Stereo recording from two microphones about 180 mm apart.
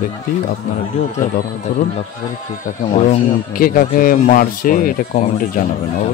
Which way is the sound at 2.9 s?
45° left (ahead or behind).